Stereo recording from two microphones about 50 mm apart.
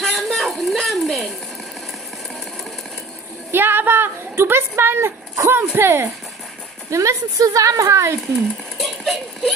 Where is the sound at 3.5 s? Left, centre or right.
Right.